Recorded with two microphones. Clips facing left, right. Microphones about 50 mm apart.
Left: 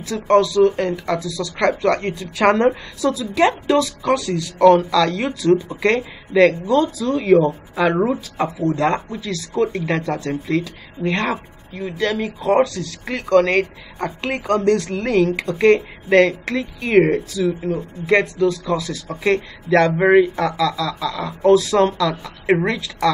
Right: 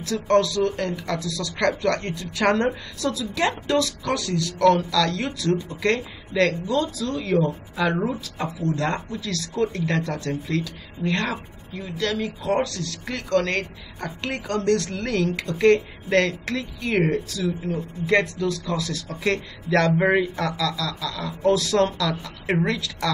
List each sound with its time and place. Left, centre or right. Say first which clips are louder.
0.0 s a woman's voice: left 4 dB; centre
7.2 s a woman's voice: left 8 dB; left; by 16.6 s centre
16.8 s a woman's voice: left 8 dB; left
18.0 s a woman's voice: left 5 dB; centre